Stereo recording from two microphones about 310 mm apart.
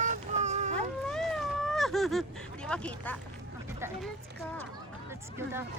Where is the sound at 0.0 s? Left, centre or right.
Right.